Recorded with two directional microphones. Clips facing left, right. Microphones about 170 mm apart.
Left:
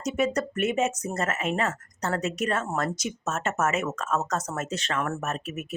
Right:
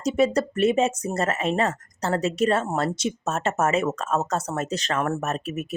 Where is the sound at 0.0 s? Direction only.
30° right (ahead or behind).